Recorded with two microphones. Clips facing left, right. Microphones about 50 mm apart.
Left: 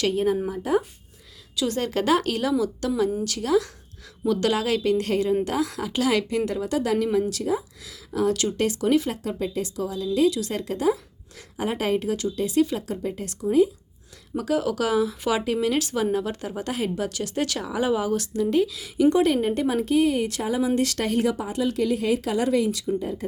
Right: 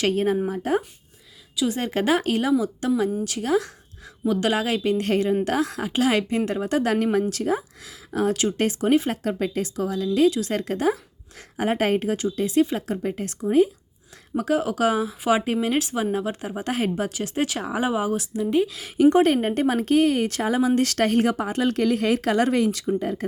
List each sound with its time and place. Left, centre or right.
0.1 s a woman's voice: right
1.5 s a woman's voice: centre
1.8 s speech: right
4.3 s speech: right
10.2 s speech: right; by 16.6 s centre
16.6 s speech: right
17.0 s speech: right
18.7 s a woman's voice: right